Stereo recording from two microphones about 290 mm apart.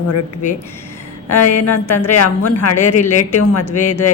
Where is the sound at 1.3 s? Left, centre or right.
Left.